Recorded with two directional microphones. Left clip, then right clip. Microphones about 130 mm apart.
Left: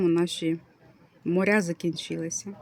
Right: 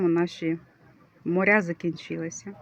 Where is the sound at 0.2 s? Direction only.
20° left (ahead or behind).